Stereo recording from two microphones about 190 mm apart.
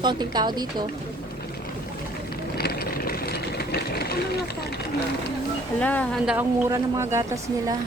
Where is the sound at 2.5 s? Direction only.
55° left (ahead or behind).